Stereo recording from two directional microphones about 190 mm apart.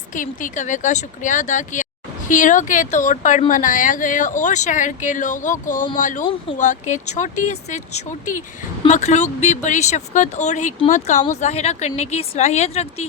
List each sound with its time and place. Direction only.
0.1 s speech: 45° left (ahead or behind)